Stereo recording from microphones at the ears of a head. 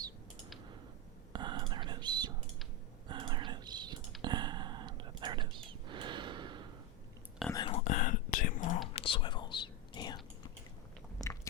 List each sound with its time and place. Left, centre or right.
1.3 s whispering: right
7.5 s whispering: left